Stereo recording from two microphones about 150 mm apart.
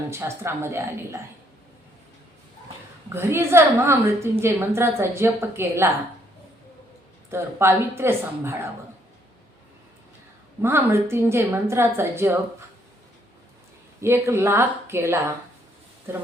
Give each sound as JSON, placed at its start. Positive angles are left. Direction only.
{"t": 0.1, "sound": "a woman's voice", "side_deg": -15}
{"t": 3.1, "sound": "a woman's voice", "side_deg": -15}
{"t": 7.3, "sound": "a woman's voice", "side_deg": -15}
{"t": 10.6, "sound": "a woman's voice", "side_deg": -15}
{"t": 14.0, "sound": "a woman's voice", "side_deg": -15}